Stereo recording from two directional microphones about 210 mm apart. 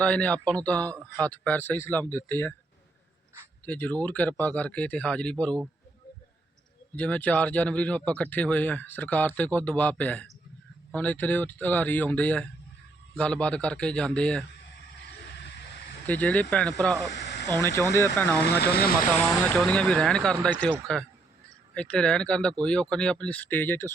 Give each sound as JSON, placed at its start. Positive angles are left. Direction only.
{"t": 0.0, "sound": "a man's voice", "side_deg": 5}
{"t": 3.7, "sound": "speech", "side_deg": 5}
{"t": 6.9, "sound": "a man's voice", "side_deg": 5}
{"t": 16.0, "sound": "a man's voice", "side_deg": 5}
{"t": 17.1, "sound": "snake", "side_deg": 55}
{"t": 17.5, "sound": "speech", "side_deg": 15}
{"t": 18.3, "sound": "speech", "side_deg": 50}
{"t": 19.1, "sound": "a man's voice", "side_deg": 10}